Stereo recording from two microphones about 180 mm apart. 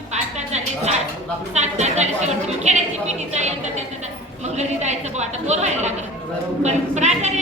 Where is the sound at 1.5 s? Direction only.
40° right (ahead or behind).